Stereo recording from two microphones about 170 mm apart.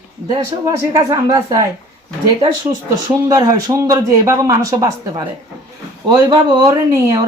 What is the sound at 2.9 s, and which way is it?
Speech, 20° right (ahead or behind).